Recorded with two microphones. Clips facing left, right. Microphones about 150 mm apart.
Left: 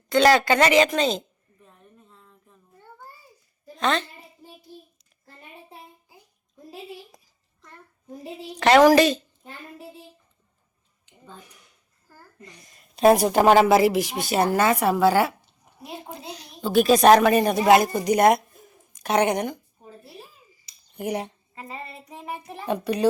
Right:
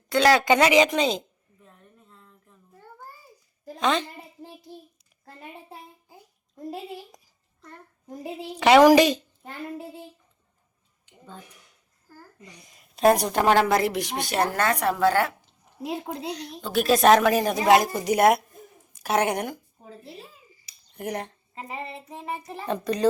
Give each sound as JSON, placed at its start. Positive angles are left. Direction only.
{"t": 0.1, "sound": "a woman's voice", "side_deg": -5}
{"t": 1.5, "sound": "a sound", "side_deg": 0}
{"t": 3.8, "sound": "a woman's voice", "side_deg": -10}
{"t": 8.5, "sound": "a woman's voice", "side_deg": -10}
{"t": 12.0, "sound": "a sound", "side_deg": -15}
{"t": 13.0, "sound": "a woman's voice", "side_deg": 5}
{"t": 15.8, "sound": "a woman's voice", "side_deg": -90}
{"t": 16.3, "sound": "a woman's voice", "side_deg": 10}
{"t": 20.9, "sound": "speech", "side_deg": 5}
{"t": 21.5, "sound": "child singing", "side_deg": -20}
{"t": 21.9, "sound": "child singing", "side_deg": 5}